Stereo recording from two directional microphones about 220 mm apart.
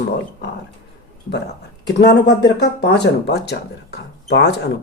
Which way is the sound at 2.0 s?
50° left (ahead or behind).